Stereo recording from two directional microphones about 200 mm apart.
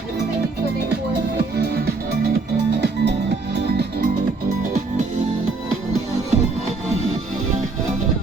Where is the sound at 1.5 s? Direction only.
55° right (ahead or behind).